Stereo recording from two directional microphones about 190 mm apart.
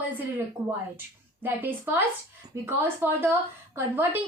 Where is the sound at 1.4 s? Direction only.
10° right (ahead or behind).